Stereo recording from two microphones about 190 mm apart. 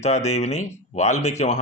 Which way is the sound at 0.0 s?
35° left (ahead or behind).